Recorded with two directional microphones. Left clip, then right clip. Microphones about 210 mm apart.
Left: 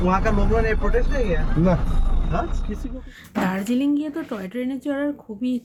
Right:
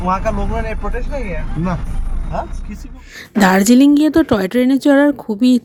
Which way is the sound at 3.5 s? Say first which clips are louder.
Right 13 dB; 50° right (ahead or behind).